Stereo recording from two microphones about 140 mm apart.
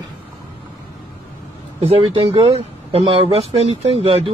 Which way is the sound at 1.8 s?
40° right (ahead or behind).